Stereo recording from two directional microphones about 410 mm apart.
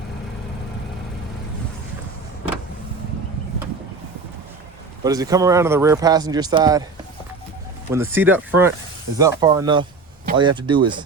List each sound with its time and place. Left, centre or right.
5.0 s speech: centre
7.9 s speech: centre